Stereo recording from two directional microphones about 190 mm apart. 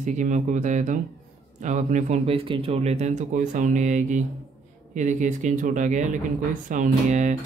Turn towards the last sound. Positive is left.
turn(degrees=-40)  # may be behind; listen again after turning